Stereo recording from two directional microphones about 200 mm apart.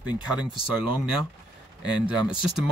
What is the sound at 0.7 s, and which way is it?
Speech, centre (ahead or behind).